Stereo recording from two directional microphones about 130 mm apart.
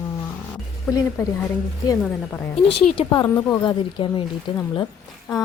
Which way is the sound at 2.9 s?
35° left (ahead or behind).